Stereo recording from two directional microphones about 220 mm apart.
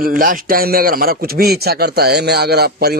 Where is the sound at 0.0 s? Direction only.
40° right (ahead or behind).